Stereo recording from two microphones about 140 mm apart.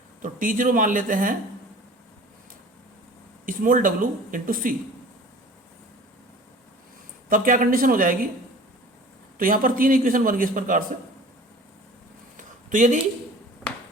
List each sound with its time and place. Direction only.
0.2 s speech: 70° right (ahead or behind)
3.4 s speech: 75° right (ahead or behind)
7.3 s speech: 75° right (ahead or behind)
9.4 s a man's voice: 85° right
12.4 s a sound: 65° right (ahead or behind)